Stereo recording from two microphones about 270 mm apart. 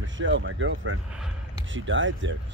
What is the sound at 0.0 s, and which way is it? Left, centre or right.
Speech, right.